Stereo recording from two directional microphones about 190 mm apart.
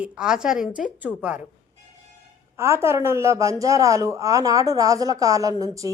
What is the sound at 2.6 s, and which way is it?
Speech, 15° right (ahead or behind).